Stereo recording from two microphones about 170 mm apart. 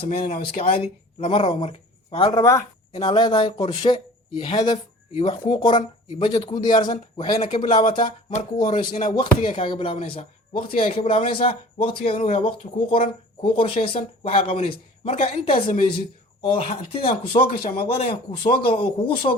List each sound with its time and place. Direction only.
0.0 s speech: 35° left (ahead or behind)
2.4 s speech: 15° left (ahead or behind)
2.9 s speech: 30° left (ahead or behind)